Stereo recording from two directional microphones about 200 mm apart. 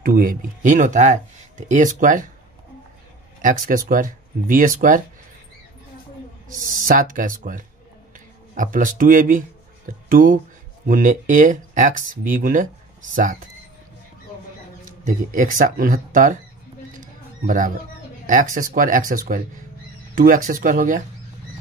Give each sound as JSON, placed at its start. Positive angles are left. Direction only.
{"t": 0.0, "sound": "speech", "side_deg": -45}
{"t": 3.4, "sound": "speech", "side_deg": -45}
{"t": 6.5, "sound": "speech", "side_deg": -40}
{"t": 14.9, "sound": "speech", "side_deg": -40}
{"t": 17.0, "sound": "mouse", "side_deg": -40}
{"t": 18.2, "sound": "speech", "side_deg": -40}